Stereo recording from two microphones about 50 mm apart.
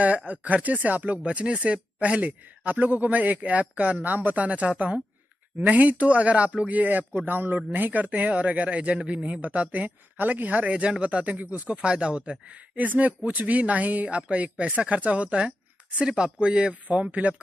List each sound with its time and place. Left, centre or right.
0.3 s speech: right
1.2 s speech: right